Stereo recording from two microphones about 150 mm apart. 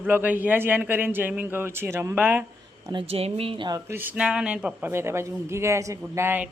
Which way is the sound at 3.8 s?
15° right (ahead or behind).